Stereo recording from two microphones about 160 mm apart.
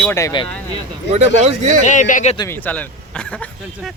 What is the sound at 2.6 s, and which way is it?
Speech, 10° left (ahead or behind).